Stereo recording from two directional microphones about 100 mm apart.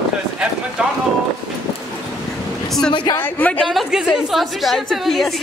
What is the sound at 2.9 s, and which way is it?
Speech, 50° left (ahead or behind).